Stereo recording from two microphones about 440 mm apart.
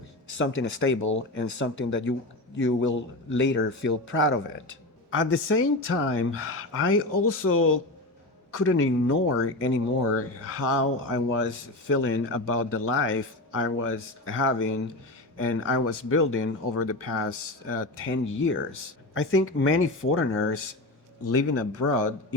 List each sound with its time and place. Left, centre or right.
0.3 s speech: left